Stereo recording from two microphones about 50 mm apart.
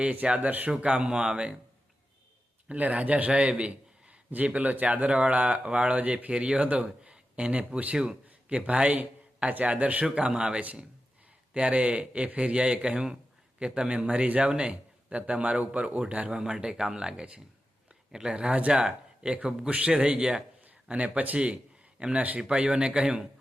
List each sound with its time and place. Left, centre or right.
0.0 s speech: right
2.6 s speech: right
3.6 s a sound: right
4.3 s a man's voice: right
16.4 s speech: centre
20.8 s a man's voice: right